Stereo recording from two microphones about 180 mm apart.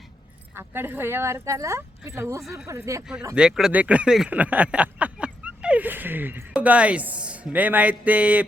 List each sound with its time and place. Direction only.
0.5 s speech: 10° right (ahead or behind)
2.4 s speech: centre (ahead or behind)
2.6 s speech: 15° right (ahead or behind)
3.3 s speech: 5° right (ahead or behind)